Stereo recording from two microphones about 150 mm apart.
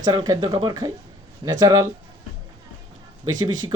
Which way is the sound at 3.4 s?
25° right (ahead or behind).